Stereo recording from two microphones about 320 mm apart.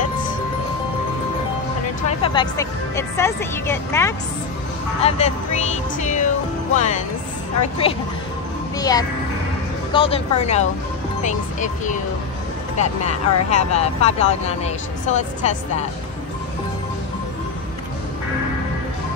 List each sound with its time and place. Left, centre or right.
2.0 s speech: centre
5.0 s speech: left
8.7 s a child's voice: centre